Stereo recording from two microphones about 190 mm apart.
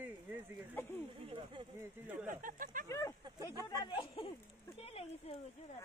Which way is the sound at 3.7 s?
20° left (ahead or behind).